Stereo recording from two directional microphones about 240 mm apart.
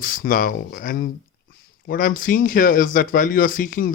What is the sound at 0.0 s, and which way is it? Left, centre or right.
Speech, left.